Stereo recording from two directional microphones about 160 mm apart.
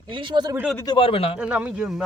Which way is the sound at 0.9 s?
35° left (ahead or behind).